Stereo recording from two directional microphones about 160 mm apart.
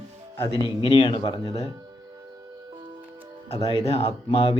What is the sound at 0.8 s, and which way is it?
Speech, 30° left (ahead or behind).